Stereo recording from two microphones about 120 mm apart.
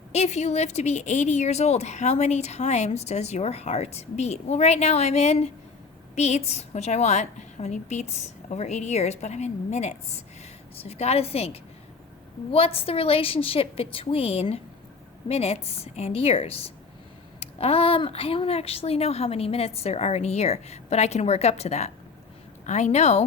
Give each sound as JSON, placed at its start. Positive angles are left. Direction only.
{"t": 0.1, "sound": "a woman's voice", "side_deg": 65}